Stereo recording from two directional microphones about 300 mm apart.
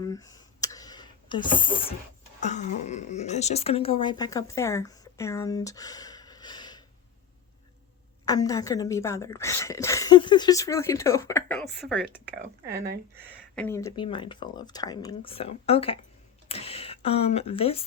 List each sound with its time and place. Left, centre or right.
0.0 s a sound: centre
2.4 s speech: left
8.2 s a woman's voice: centre
13.6 s a woman's voice: centre
16.5 s a sound: centre
17.2 s speech: centre